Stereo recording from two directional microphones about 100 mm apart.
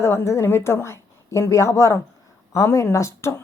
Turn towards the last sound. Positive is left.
turn(degrees=30)  # may be behind; listen again after turning